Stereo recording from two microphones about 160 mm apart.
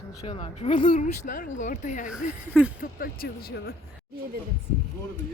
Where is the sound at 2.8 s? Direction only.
65° left (ahead or behind).